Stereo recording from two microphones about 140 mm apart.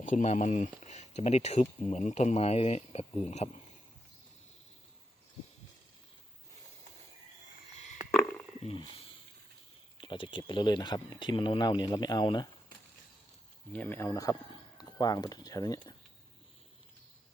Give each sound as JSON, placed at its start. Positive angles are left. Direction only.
{"t": 0.0, "sound": "speech", "side_deg": 60}
{"t": 8.6, "sound": "speech", "side_deg": 40}
{"t": 13.7, "sound": "speech", "side_deg": 15}